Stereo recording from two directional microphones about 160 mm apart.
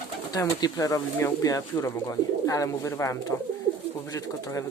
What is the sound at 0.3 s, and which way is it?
Speech, 25° left (ahead or behind).